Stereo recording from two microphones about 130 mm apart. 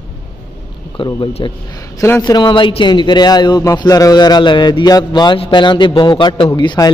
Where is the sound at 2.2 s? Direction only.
30° left (ahead or behind).